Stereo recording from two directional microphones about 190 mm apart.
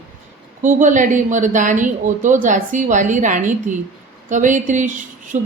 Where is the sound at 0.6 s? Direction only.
40° right (ahead or behind).